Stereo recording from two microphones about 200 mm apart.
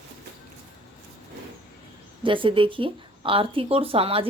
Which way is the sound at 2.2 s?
25° right (ahead or behind).